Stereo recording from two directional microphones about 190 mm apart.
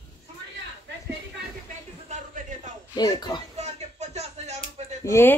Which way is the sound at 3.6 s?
35° right (ahead or behind).